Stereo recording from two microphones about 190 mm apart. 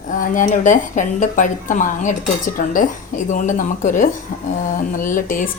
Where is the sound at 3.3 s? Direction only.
40° left (ahead or behind).